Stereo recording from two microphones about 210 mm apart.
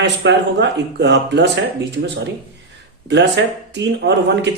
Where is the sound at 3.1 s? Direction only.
55° right (ahead or behind).